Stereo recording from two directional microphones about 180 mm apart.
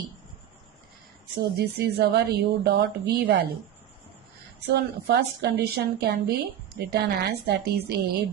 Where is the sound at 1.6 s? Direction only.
65° right (ahead or behind).